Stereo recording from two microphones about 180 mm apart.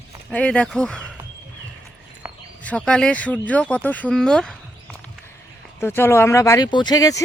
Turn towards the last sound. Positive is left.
turn(degrees=20)  # may be behind; listen again after turning